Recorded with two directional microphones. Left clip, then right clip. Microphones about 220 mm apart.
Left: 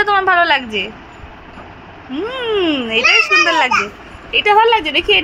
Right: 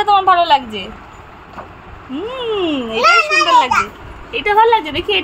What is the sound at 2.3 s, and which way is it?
Speech, 5° right (ahead or behind).